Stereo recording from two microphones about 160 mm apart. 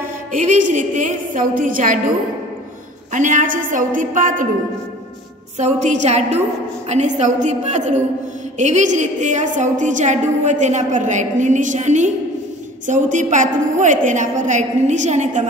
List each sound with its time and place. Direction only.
0.3 s a woman's voice: 50° right (ahead or behind)
3.1 s a woman's voice: 55° right (ahead or behind)
5.6 s a woman's voice: 50° right (ahead or behind)